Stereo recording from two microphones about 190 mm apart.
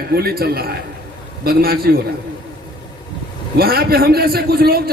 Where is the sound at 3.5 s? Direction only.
55° right (ahead or behind).